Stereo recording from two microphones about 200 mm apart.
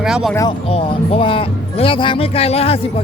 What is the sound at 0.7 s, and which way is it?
Speech, 30° left (ahead or behind).